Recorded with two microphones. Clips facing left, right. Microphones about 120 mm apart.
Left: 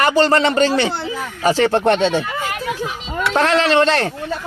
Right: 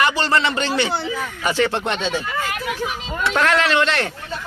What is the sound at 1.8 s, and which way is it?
Speech, 60° left (ahead or behind).